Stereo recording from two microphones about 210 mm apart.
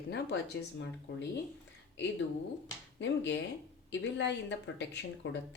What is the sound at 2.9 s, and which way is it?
Speech, 60° left (ahead or behind).